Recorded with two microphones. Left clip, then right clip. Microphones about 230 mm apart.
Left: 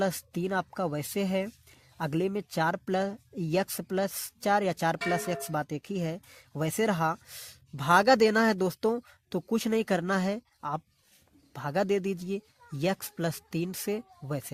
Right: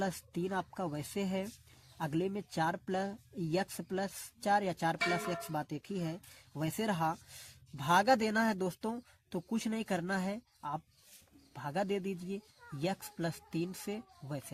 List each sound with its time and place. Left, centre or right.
0.0 s speech: left